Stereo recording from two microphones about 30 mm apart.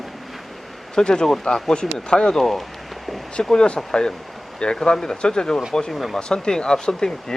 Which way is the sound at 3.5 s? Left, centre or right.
Left.